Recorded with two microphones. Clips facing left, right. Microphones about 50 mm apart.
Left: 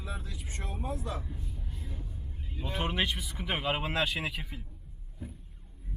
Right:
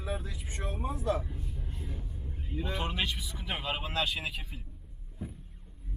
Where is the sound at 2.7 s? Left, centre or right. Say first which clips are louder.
Left 3 dB; left.